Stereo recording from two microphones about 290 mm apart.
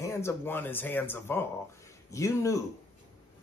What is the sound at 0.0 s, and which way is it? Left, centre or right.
Speech, centre.